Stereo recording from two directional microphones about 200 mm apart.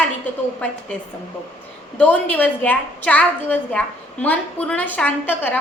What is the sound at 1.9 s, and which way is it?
A woman's voice, 5° left (ahead or behind).